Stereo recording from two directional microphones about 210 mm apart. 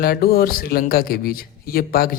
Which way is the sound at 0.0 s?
45° left (ahead or behind).